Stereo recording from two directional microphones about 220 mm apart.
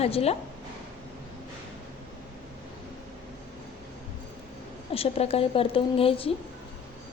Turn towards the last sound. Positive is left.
turn(degrees=25)  # may be behind; listen again after turning